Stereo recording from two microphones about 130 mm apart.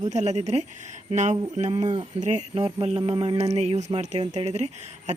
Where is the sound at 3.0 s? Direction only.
40° right (ahead or behind).